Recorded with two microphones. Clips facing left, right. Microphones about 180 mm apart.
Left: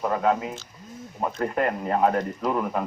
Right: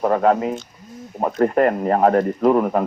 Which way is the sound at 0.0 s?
55° right (ahead or behind).